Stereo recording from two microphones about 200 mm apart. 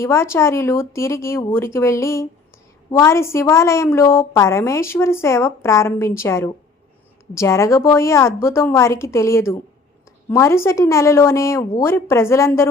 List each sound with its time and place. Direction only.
0.0 s a woman's voice: 15° left (ahead or behind)